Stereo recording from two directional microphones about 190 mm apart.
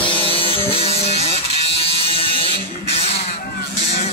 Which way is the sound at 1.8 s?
30° left (ahead or behind).